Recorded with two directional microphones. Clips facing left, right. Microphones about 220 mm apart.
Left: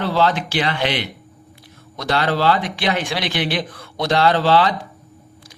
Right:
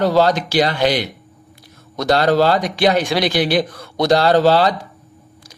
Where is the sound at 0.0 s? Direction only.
40° right (ahead or behind).